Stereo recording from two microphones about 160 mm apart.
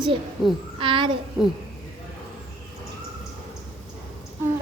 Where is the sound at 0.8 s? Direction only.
30° right (ahead or behind).